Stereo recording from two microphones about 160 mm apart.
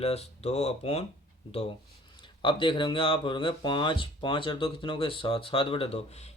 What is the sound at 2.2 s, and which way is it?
Speech, 30° left (ahead or behind).